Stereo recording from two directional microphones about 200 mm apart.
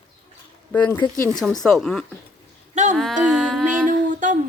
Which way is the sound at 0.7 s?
10° left (ahead or behind).